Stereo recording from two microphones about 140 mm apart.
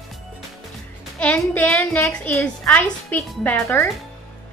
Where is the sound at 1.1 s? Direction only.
10° left (ahead or behind).